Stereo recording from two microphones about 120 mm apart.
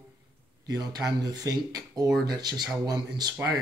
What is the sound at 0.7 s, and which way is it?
Speech, 35° right (ahead or behind).